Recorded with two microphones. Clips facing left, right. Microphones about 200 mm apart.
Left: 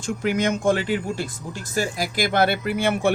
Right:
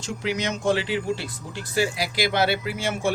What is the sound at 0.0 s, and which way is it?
Speech, 50° left (ahead or behind).